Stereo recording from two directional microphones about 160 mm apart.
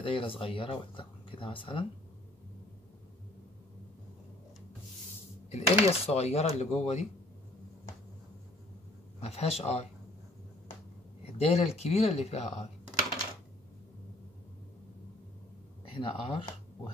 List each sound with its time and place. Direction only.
0.0 s speech: 35° left (ahead or behind)
5.5 s speech: 40° left (ahead or behind)
9.2 s speech: 40° left (ahead or behind)
11.3 s speech: 40° left (ahead or behind)
15.9 s speech: 35° left (ahead or behind)